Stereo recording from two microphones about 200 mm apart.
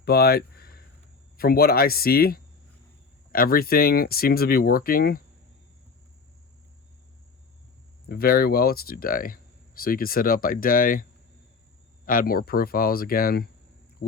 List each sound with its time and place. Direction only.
0.0 s a sound: 50° left (ahead or behind)
1.4 s speech: 50° left (ahead or behind)
8.0 s speech: 50° left (ahead or behind)
12.0 s speech: 45° left (ahead or behind)